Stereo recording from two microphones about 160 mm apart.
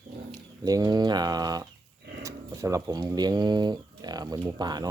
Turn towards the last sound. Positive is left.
turn(degrees=-25)  # may be behind; listen again after turning